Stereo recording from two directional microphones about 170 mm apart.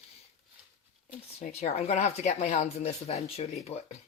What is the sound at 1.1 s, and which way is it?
Speech, 40° left (ahead or behind).